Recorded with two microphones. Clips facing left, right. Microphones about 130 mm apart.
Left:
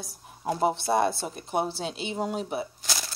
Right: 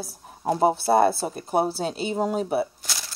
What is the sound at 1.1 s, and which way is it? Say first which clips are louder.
Speech: right 6 dB; 5° right (ahead or behind).